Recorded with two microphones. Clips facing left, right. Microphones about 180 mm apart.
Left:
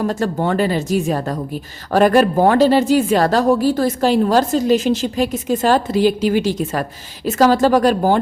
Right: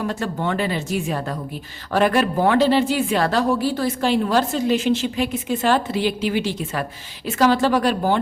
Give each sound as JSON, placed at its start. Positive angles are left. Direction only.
{"t": 0.0, "sound": "a woman's voice", "side_deg": 40}